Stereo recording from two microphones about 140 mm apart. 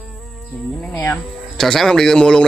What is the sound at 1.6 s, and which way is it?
Speech, 5° left (ahead or behind).